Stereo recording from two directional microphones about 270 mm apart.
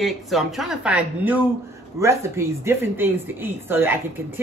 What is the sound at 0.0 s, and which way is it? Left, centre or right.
A woman's voice, centre.